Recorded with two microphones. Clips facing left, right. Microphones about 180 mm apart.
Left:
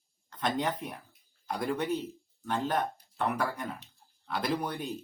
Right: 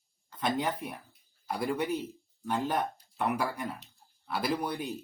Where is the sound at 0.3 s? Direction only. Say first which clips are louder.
Even; 5° right (ahead or behind).